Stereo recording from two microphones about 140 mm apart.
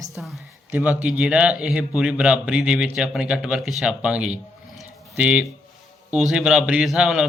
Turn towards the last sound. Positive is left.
turn(degrees=-5)  # may be behind; listen again after turning